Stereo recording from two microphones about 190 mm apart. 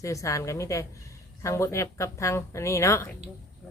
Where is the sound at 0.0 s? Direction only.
15° left (ahead or behind).